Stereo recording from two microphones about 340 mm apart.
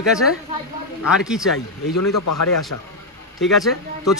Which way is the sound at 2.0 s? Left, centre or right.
Left.